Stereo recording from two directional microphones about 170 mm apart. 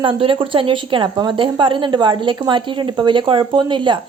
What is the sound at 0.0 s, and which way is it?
A woman's voice, 30° right (ahead or behind).